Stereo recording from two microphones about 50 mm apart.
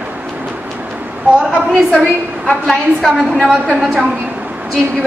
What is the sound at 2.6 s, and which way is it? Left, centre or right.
Speech, centre.